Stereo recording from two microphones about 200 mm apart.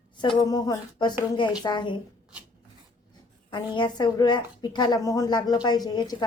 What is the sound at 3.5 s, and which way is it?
A woman's voice, 25° left (ahead or behind).